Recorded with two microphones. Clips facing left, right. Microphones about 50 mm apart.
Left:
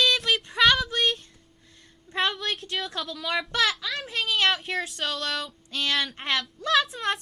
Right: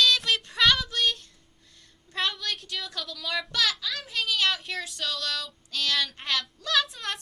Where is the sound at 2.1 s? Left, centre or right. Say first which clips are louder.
Left 3 dB; left.